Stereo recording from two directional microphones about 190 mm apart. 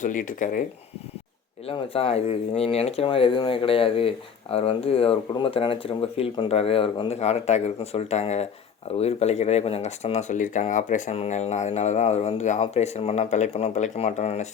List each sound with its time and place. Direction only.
0.0 s speech: 45° left (ahead or behind)
1.6 s speech: 30° left (ahead or behind)